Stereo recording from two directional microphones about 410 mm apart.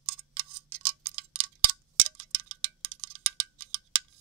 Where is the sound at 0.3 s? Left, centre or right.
Right.